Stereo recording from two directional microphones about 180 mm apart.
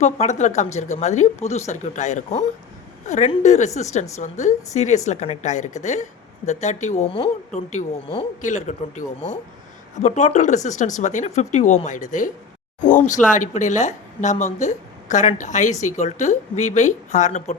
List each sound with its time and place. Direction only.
0.0 s a woman's voice: 40° left (ahead or behind)